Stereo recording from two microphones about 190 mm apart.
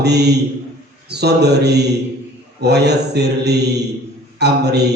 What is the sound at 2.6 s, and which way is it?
Speech, 60° right (ahead or behind).